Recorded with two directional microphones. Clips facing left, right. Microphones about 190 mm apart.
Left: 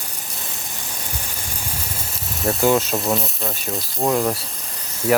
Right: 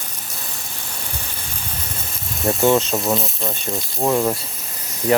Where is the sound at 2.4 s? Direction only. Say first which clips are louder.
Right 1 dB; centre (ahead or behind).